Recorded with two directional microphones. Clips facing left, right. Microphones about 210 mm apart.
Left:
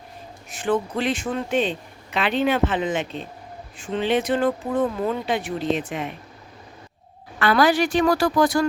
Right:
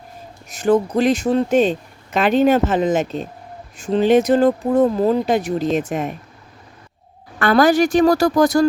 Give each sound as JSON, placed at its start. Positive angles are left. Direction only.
{"t": 0.5, "sound": "speech", "side_deg": -40}
{"t": 7.3, "sound": "speech", "side_deg": -45}